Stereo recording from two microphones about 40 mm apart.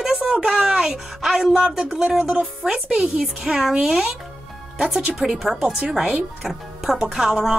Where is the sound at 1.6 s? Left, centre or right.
Right.